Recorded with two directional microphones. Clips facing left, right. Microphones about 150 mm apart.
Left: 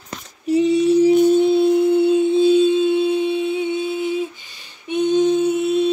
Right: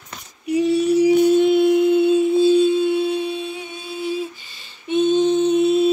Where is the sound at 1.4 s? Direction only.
25° left (ahead or behind).